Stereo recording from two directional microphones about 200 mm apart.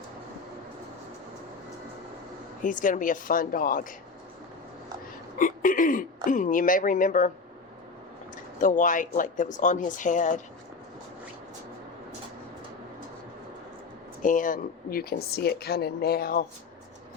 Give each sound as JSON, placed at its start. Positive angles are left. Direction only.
{"t": 2.6, "sound": "speech", "side_deg": 40}
{"t": 5.4, "sound": "speech", "side_deg": 40}
{"t": 8.6, "sound": "speech", "side_deg": 40}
{"t": 14.2, "sound": "speech", "side_deg": 40}